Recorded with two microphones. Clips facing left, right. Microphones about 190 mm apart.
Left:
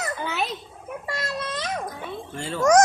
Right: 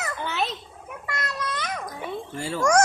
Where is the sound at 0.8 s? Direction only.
30° left (ahead or behind).